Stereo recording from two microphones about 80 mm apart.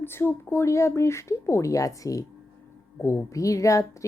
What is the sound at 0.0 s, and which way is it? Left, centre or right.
Speech, left.